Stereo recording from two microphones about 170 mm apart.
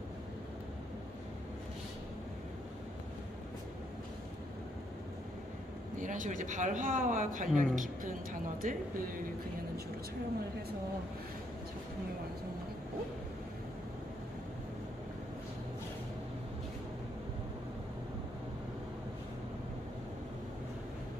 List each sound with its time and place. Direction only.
5.9 s speech: 50° right (ahead or behind)